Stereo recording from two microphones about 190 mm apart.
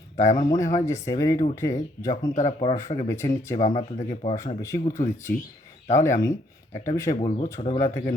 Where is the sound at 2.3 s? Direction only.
35° left (ahead or behind).